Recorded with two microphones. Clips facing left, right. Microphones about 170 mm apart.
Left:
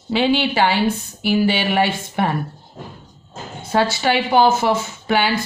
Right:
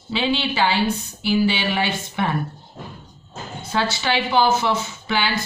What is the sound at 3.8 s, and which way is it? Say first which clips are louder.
Speech: left 3 dB; 50° left (ahead or behind).